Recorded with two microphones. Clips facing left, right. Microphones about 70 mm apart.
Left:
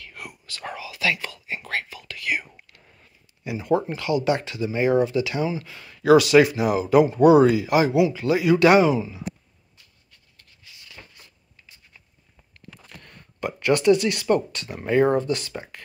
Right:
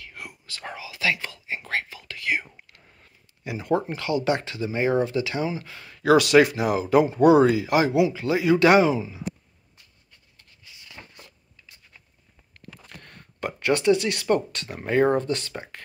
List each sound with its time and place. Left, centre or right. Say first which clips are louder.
0.0 s whispering: left 1 dB; right
3.0 s speech: left 2 dB; right
12.5 s a sound: right 1 dB; right
14.9 s speech: left 1 dB; right